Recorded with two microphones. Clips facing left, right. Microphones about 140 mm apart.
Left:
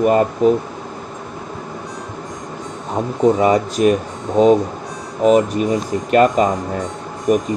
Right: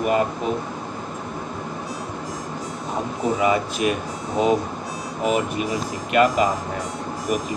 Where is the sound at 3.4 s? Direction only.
40° left (ahead or behind).